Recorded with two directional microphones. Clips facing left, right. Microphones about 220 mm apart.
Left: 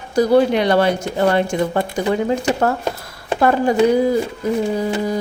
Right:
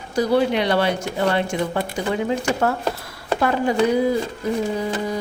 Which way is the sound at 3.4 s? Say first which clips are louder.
Left 5 dB; 45° left (ahead or behind).